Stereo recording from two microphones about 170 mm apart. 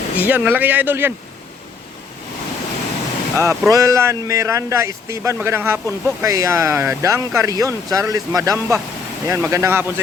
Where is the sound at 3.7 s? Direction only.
20° right (ahead or behind).